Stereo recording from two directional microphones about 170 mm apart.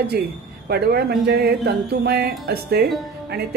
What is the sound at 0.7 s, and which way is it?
Speech, 70° right (ahead or behind).